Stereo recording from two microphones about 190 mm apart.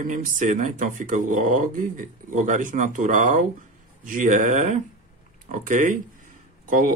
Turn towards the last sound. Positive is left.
turn(degrees=-45)  # may be behind; listen again after turning